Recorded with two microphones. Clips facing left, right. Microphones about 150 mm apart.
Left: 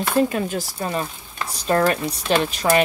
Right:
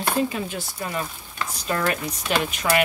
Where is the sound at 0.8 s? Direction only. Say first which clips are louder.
Left 1 dB; 30° left (ahead or behind).